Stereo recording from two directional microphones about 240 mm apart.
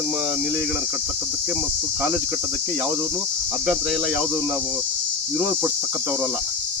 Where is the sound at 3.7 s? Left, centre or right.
Centre.